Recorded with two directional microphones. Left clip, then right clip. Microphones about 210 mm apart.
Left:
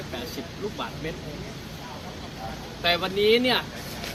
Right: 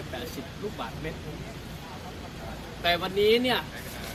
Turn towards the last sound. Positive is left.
turn(degrees=15)  # may be behind; listen again after turning